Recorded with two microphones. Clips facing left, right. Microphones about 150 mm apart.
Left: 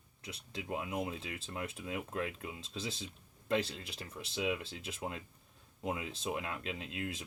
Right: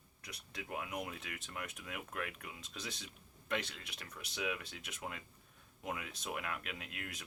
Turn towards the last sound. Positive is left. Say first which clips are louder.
# left 7 dB
turn(degrees=25)  # may be behind; listen again after turning